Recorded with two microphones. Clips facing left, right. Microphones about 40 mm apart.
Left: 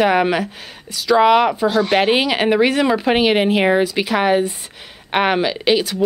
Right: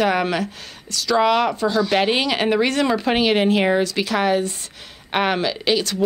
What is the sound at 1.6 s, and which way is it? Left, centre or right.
Speech, left.